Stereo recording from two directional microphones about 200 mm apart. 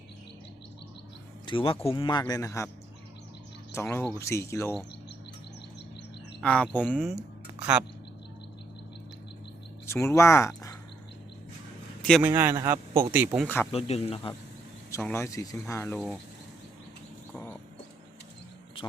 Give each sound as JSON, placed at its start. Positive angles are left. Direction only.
{"t": 1.5, "sound": "speech", "side_deg": 25}
{"t": 3.7, "sound": "speech", "side_deg": 15}
{"t": 6.4, "sound": "speech", "side_deg": 5}
{"t": 9.8, "sound": "speech", "side_deg": 15}
{"t": 12.2, "sound": "speech", "side_deg": -10}
{"t": 13.7, "sound": "speech", "side_deg": 30}
{"t": 14.8, "sound": "speech", "side_deg": 15}
{"t": 17.3, "sound": "bird", "side_deg": 5}